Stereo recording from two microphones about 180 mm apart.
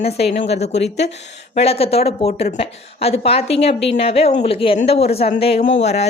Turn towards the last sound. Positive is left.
turn(degrees=35)  # may be behind; listen again after turning